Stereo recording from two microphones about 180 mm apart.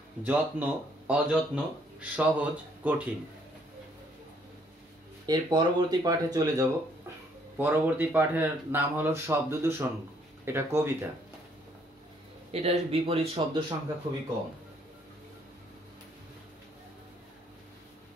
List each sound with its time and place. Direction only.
0.2 s speech: 10° right (ahead or behind)
5.2 s speech: 25° right (ahead or behind)
12.4 s speech: 35° right (ahead or behind)